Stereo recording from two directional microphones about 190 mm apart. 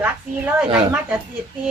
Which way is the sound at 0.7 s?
5° right (ahead or behind).